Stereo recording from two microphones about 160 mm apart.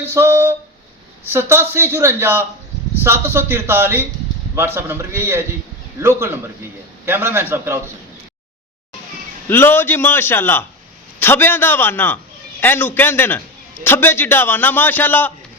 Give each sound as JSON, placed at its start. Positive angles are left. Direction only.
{"t": 0.0, "sound": "a man's voice", "side_deg": -15}
{"t": 9.5, "sound": "a man's voice", "side_deg": 15}